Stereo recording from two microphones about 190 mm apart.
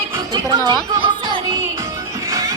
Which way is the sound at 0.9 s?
25° right (ahead or behind).